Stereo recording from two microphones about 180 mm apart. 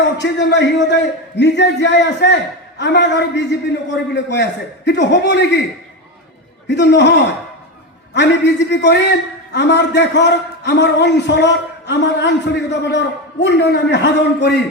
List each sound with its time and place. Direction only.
0.0 s a man's voice: 75° left (ahead or behind)
6.7 s a man's voice: 75° left (ahead or behind)